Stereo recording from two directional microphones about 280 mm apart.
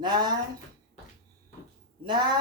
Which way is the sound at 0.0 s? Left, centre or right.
Centre.